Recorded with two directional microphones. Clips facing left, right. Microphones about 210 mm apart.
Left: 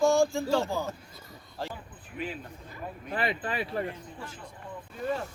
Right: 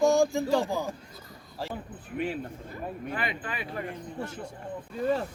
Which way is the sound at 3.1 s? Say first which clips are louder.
Left 8 dB; 35° left (ahead or behind).